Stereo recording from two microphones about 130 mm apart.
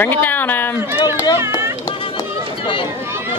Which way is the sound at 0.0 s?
15° left (ahead or behind).